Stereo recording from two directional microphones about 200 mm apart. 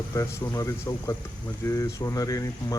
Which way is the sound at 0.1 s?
15° left (ahead or behind).